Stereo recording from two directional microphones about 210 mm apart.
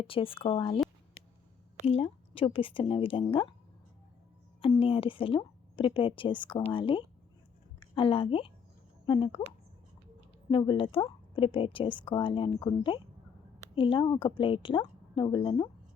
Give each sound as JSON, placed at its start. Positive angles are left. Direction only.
{"t": 0.0, "sound": "a woman's voice", "side_deg": 25}
{"t": 1.9, "sound": "a woman's voice", "side_deg": 25}
{"t": 4.6, "sound": "a woman's voice", "side_deg": 25}
{"t": 10.5, "sound": "a woman's voice", "side_deg": 25}